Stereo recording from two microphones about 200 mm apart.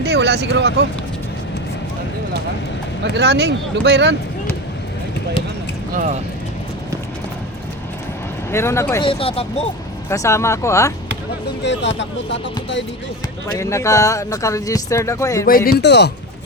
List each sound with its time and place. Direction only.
0.0 s speech: 55° right (ahead or behind)
3.0 s speech: 55° right (ahead or behind)
5.9 s speech: 40° right (ahead or behind)
8.5 s speech: 15° left (ahead or behind)
9.0 s speech: 30° left (ahead or behind)
10.1 s speech: 15° left (ahead or behind)
11.6 s speech: 60° left (ahead or behind)
13.6 s speech: 15° left (ahead or behind)
15.4 s speech: 45° left (ahead or behind)
15.8 s speech: 60° left (ahead or behind)